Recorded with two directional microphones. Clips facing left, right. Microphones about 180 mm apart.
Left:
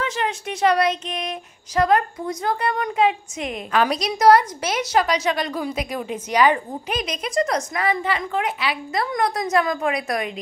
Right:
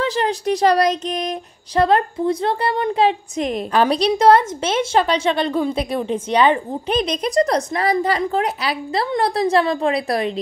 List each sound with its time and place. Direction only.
0.0 s a woman's voice: 35° right (ahead or behind)